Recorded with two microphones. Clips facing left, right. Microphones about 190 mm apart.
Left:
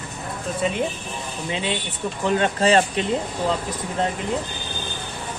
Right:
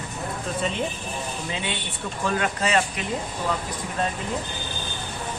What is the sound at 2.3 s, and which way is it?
Speech, 30° left (ahead or behind).